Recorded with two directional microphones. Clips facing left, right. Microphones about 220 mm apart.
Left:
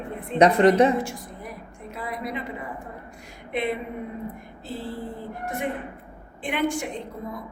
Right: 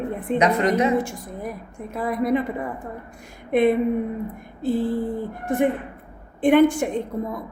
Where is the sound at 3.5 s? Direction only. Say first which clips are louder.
Right 10 dB; 50° right (ahead or behind).